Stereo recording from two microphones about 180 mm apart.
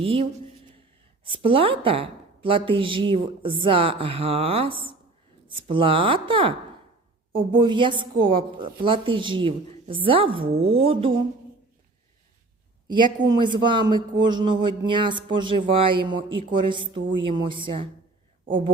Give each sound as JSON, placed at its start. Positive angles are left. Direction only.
{"t": 0.0, "sound": "a woman's voice", "side_deg": -30}
{"t": 12.9, "sound": "a woman's voice", "side_deg": -25}